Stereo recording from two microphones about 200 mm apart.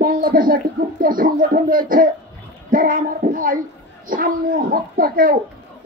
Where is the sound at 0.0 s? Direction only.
45° right (ahead or behind).